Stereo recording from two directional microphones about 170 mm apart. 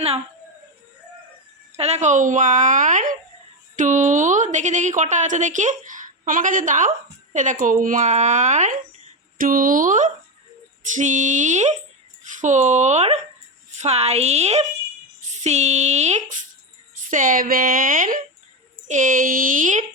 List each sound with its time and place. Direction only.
1.7 s a woman's voice: 40° right (ahead or behind)